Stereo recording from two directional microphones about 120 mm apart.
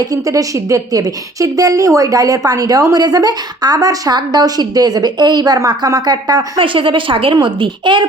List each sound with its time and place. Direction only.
0.0 s a woman's voice: 30° right (ahead or behind)
6.6 s a woman's voice: 45° right (ahead or behind)